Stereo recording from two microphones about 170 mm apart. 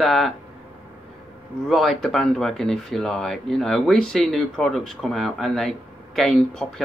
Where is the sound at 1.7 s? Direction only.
Centre (ahead or behind).